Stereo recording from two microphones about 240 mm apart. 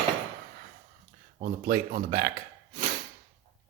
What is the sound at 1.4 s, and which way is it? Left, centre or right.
Speech, right.